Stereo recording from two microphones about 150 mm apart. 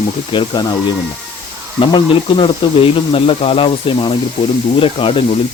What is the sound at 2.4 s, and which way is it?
Speech, 40° left (ahead or behind).